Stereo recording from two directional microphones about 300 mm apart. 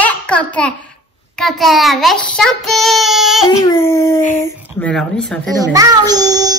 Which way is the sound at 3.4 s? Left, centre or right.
Centre.